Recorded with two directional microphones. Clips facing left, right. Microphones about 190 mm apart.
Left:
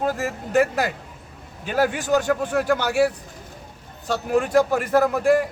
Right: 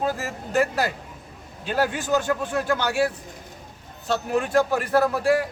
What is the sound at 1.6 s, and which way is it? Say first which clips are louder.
Speech: left 2 dB; 10° left (ahead or behind).